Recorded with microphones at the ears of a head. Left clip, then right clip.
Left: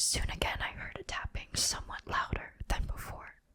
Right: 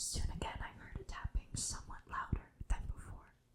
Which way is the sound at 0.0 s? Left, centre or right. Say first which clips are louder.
Left 11 dB; left.